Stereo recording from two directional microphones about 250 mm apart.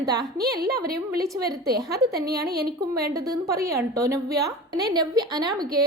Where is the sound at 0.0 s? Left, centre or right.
Centre.